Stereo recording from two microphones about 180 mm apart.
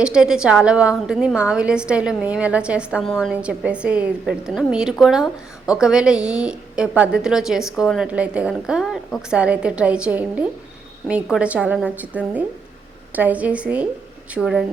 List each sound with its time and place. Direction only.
0.0 s a woman's voice: 5° right (ahead or behind)